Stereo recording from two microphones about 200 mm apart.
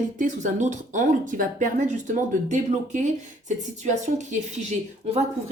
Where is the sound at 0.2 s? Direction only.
40° right (ahead or behind).